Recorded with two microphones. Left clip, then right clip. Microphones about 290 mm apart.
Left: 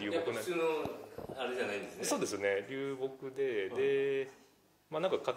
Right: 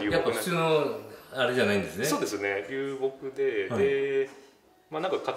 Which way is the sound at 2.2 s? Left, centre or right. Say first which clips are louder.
Right 4 dB; left.